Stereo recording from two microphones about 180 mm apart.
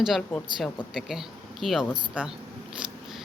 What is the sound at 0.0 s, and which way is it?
Speech, centre (ahead or behind).